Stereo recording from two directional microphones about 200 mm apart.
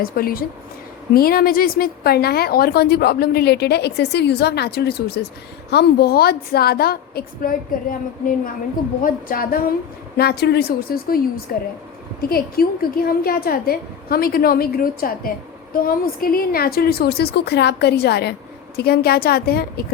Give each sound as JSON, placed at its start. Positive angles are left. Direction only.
{"t": 0.0, "sound": "a woman's voice", "side_deg": 45}
{"t": 9.0, "sound": "a woman's voice", "side_deg": 45}